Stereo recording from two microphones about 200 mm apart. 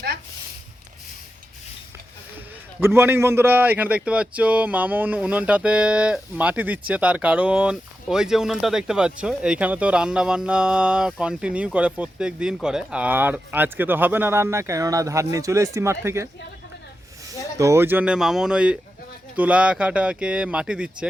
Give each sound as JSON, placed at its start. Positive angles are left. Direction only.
{"t": 2.8, "sound": "a man's voice", "side_deg": -10}
{"t": 17.6, "sound": "speech", "side_deg": -15}